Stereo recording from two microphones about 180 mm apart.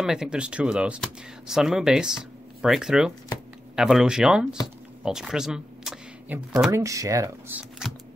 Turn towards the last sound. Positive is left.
turn(degrees=-10)  # may be behind; listen again after turning